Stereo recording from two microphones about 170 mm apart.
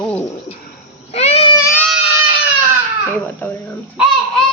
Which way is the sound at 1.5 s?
15° left (ahead or behind).